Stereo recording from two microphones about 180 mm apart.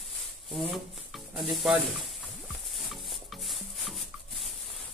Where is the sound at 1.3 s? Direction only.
Centre (ahead or behind).